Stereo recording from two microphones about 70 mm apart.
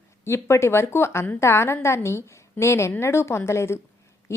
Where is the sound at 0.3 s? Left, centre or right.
Left.